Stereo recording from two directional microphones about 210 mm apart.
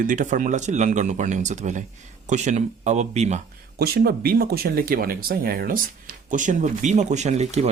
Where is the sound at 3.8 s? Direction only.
45° right (ahead or behind).